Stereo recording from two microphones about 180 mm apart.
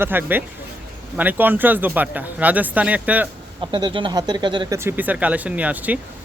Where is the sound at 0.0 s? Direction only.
10° right (ahead or behind).